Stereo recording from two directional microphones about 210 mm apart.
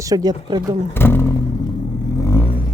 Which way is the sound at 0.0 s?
15° right (ahead or behind).